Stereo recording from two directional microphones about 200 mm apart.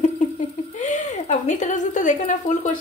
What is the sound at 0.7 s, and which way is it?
A woman's voice, 35° left (ahead or behind).